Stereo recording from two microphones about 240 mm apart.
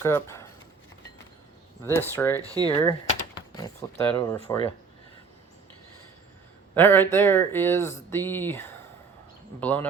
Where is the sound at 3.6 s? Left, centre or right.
Centre.